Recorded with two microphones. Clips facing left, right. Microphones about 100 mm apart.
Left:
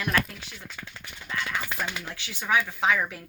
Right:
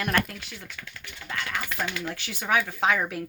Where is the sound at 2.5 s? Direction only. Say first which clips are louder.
Even; 50° right (ahead or behind).